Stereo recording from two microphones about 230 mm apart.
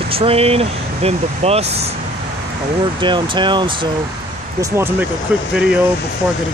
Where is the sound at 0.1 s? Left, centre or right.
Right.